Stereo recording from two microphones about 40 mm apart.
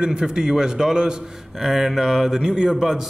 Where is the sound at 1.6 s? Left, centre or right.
Centre.